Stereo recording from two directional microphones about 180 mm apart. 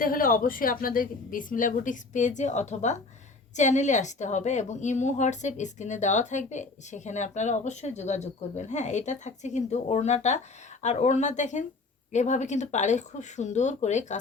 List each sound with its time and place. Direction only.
0.0 s a woman's voice: 50° left (ahead or behind)